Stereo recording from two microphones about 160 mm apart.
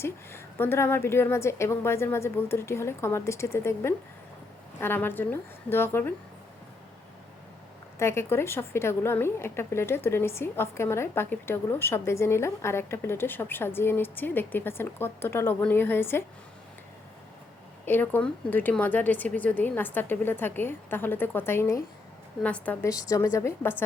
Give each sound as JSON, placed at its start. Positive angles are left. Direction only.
{"t": 0.0, "sound": "a woman's voice", "side_deg": 15}
{"t": 7.9, "sound": "a woman's voice", "side_deg": 15}
{"t": 17.8, "sound": "a woman's voice", "side_deg": 10}